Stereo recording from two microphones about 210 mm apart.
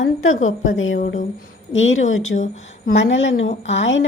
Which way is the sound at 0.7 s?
70° left (ahead or behind).